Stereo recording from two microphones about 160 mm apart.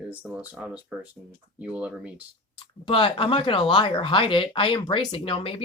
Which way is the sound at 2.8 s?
35° left (ahead or behind).